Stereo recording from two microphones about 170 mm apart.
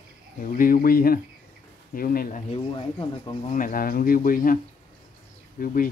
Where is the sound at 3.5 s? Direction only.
55° left (ahead or behind).